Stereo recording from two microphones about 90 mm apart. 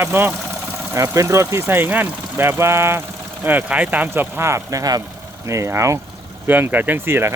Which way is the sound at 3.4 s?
20° right (ahead or behind).